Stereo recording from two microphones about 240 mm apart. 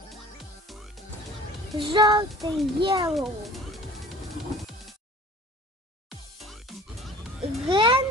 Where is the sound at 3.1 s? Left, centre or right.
Centre.